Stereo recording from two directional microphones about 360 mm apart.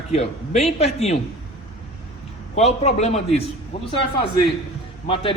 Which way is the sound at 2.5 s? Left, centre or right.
Centre.